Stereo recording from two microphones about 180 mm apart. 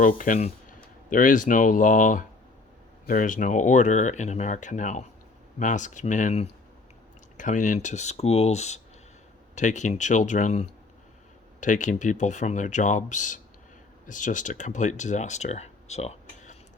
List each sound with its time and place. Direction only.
0.0 s speech: 50° left (ahead or behind)